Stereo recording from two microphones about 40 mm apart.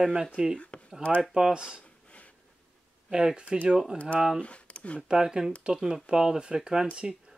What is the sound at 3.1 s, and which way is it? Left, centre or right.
Speech, centre.